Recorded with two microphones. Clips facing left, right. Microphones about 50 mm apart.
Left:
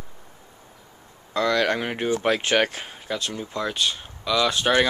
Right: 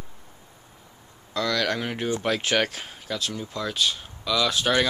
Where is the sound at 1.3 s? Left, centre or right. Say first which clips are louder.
Left 4 dB; centre.